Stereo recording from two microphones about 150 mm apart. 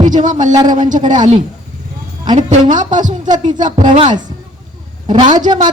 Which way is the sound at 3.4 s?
55° right (ahead or behind).